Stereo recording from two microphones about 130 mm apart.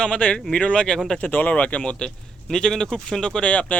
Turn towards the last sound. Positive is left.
turn(degrees=10)  # may be behind; listen again after turning